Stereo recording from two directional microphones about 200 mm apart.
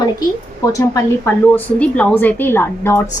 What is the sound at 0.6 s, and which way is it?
A woman's voice, 15° left (ahead or behind).